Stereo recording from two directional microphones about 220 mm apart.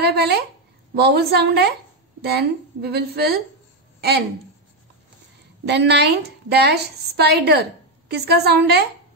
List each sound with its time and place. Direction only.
0.0 s a woman's voice: 50° right (ahead or behind)
5.7 s a woman's voice: 50° right (ahead or behind)